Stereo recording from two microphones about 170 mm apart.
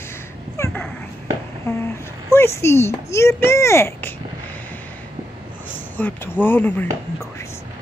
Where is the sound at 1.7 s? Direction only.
15° left (ahead or behind).